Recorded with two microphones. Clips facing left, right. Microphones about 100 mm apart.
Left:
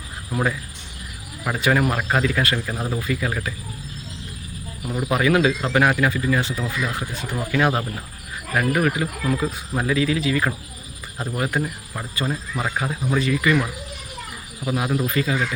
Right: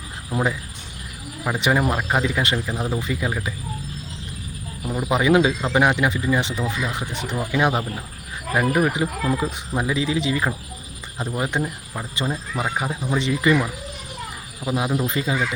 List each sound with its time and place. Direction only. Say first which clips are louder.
0.3 s speech: right 1 dB; 15° right (ahead or behind)
1.5 s speech: left 1 dB; 20° right (ahead or behind)
4.9 s speech: right 1 dB; 15° right (ahead or behind)
14.6 s speech: even; 20° right (ahead or behind)